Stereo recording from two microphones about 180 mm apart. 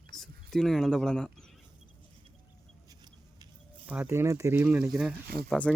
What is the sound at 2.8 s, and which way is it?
Chicken, 20° right (ahead or behind).